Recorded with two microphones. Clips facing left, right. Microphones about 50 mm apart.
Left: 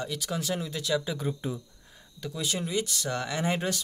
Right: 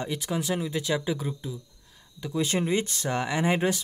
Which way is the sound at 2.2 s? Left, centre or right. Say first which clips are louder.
Right 5 dB; right.